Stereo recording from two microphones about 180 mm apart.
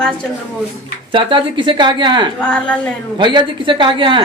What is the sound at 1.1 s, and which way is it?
Speech, 25° right (ahead or behind).